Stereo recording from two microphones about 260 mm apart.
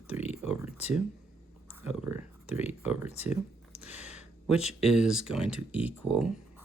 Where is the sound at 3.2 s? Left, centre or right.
Centre.